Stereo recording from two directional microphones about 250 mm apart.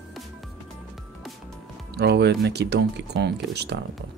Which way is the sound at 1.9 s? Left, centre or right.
Right.